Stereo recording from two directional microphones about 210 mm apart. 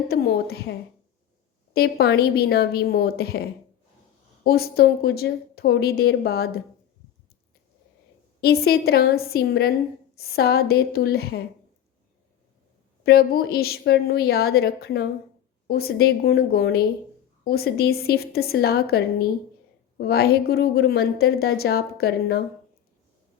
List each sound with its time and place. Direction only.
0.1 s a woman's voice: 50° left (ahead or behind)
1.7 s a woman's voice: 50° left (ahead or behind)
4.4 s a woman's voice: 45° left (ahead or behind)
8.4 s a woman's voice: 50° left (ahead or behind)
13.1 s a woman's voice: 45° left (ahead or behind)